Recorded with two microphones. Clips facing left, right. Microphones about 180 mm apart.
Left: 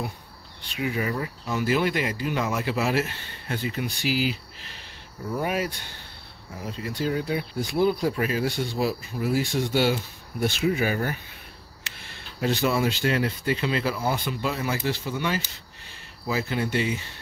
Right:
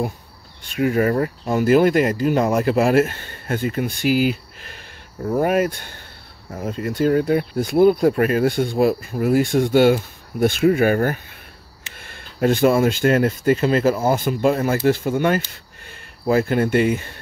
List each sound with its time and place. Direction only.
0.6 s speech: 50° right (ahead or behind)